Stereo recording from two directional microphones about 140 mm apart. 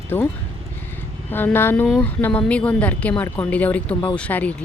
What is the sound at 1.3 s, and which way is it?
Speech, 15° left (ahead or behind).